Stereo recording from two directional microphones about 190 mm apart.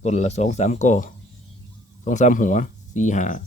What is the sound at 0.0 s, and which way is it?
Speech, 35° left (ahead or behind).